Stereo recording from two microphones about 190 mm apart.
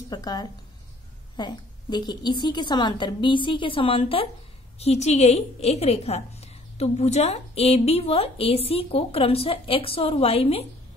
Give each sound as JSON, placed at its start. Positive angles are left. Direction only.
{"t": 0.1, "sound": "a woman's voice", "side_deg": 20}